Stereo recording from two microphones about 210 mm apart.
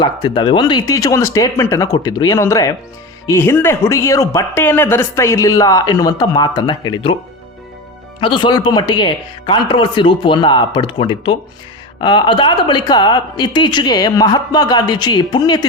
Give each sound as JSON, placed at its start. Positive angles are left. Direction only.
{"t": 0.0, "sound": "speech", "side_deg": 25}
{"t": 8.2, "sound": "speech", "side_deg": 25}